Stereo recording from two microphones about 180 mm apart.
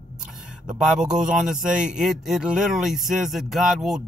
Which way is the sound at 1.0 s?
5° right (ahead or behind).